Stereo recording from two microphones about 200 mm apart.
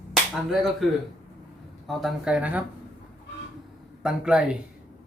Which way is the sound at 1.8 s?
Centre (ahead or behind).